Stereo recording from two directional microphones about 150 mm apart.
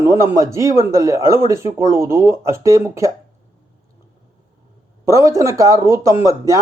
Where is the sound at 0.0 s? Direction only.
20° right (ahead or behind).